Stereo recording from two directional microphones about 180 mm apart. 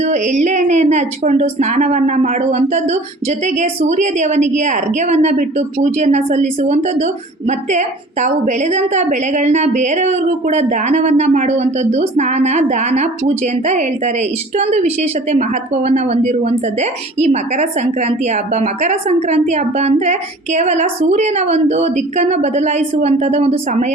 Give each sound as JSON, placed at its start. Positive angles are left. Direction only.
{"t": 0.0, "sound": "a woman's voice", "side_deg": -40}